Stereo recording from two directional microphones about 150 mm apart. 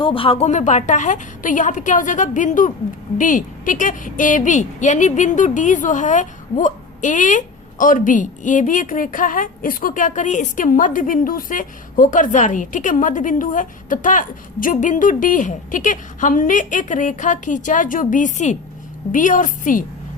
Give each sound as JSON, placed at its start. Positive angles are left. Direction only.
{"t": 0.0, "sound": "a woman's voice", "side_deg": 35}